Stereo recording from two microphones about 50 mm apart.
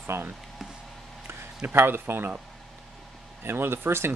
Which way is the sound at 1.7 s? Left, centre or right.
Right.